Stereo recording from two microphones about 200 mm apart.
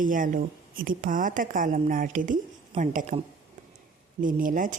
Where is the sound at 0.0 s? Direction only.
45° right (ahead or behind).